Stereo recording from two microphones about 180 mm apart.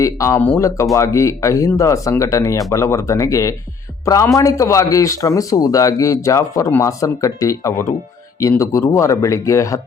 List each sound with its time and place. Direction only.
0.0 s a man's voice: 15° left (ahead or behind)